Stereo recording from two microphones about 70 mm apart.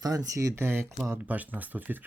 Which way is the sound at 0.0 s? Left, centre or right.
Right.